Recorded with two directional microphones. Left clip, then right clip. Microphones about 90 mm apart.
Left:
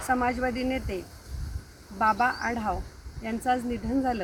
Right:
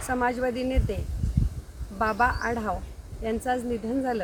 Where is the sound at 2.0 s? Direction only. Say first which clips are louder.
Even; 35° right (ahead or behind).